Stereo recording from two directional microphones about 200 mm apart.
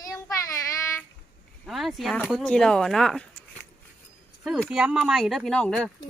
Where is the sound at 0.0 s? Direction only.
15° left (ahead or behind).